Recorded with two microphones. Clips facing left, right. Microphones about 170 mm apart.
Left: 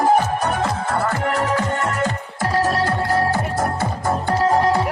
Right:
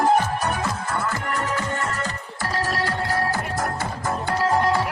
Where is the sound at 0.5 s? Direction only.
60° left (ahead or behind).